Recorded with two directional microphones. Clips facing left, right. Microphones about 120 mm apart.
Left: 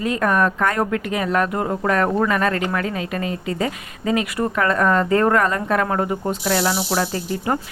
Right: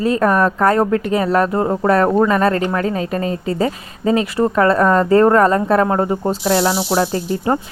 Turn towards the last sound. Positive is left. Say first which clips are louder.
# right 5 dB
turn(degrees=-30)  # may be behind; listen again after turning